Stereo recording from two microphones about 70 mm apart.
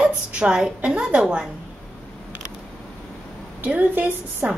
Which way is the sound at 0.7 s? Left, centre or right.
Centre.